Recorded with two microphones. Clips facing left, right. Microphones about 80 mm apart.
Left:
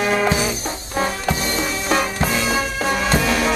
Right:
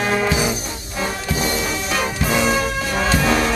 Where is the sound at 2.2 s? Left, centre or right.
Centre.